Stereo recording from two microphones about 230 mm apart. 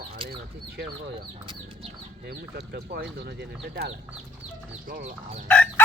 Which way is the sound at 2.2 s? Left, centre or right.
Right.